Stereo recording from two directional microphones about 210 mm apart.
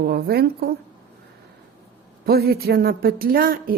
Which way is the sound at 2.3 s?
45° right (ahead or behind).